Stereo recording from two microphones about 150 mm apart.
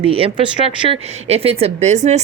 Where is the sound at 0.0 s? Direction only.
40° right (ahead or behind).